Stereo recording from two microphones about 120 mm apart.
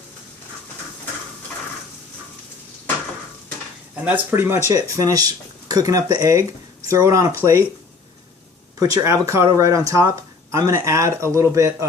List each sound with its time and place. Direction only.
3.9 s speech: 15° right (ahead or behind)
8.8 s speech: 30° right (ahead or behind)